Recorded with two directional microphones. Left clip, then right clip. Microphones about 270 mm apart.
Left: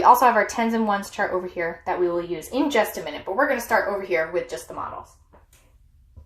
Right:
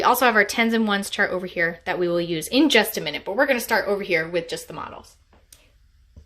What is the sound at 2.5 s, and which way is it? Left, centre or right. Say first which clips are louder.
Speech: right 3 dB; right.